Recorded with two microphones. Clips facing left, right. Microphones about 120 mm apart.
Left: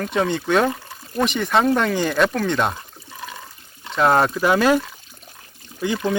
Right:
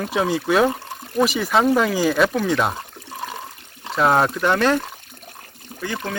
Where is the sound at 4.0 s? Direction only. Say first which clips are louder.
Left 1 dB; centre (ahead or behind).